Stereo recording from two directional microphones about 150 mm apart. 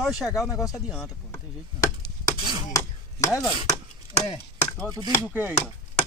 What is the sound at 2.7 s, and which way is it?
Chopping, 20° left (ahead or behind).